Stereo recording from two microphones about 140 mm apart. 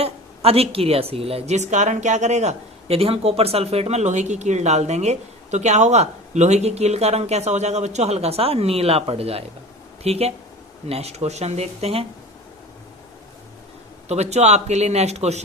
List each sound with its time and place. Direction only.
0.0 s a woman's voice: 45° right (ahead or behind)
14.1 s a woman's voice: 50° right (ahead or behind)